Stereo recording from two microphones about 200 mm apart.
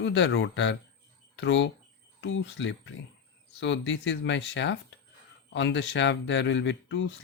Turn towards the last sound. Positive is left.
turn(degrees=65)  # may be behind; listen again after turning